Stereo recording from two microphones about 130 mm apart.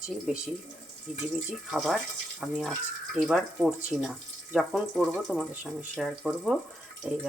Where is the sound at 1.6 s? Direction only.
Centre (ahead or behind).